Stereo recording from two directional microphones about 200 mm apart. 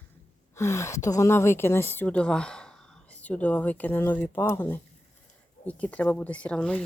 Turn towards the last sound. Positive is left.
turn(degrees=5)  # may be behind; listen again after turning